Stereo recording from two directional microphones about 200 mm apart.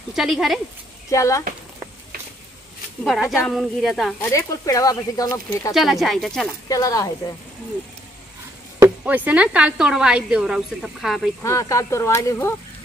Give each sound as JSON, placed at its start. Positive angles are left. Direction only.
{"t": 0.1, "sound": "speech", "side_deg": 0}
{"t": 1.1, "sound": "speech", "side_deg": 15}
{"t": 3.0, "sound": "speech", "side_deg": 0}
{"t": 4.2, "sound": "speech", "side_deg": 15}
{"t": 5.8, "sound": "speech", "side_deg": 0}
{"t": 6.7, "sound": "speech", "side_deg": 20}
{"t": 8.7, "sound": "speech", "side_deg": -10}
{"t": 11.4, "sound": "speech", "side_deg": 15}